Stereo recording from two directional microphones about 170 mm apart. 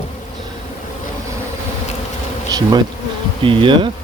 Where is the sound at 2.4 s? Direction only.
25° right (ahead or behind).